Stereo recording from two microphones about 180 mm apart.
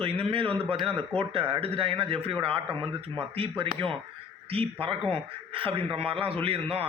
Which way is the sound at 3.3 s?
30° right (ahead or behind).